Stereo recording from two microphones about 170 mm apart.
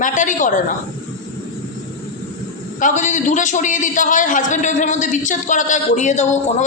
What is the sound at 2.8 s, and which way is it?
A man's voice, 50° left (ahead or behind).